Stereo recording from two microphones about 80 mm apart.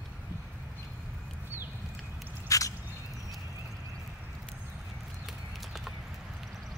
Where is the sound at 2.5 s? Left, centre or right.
Left.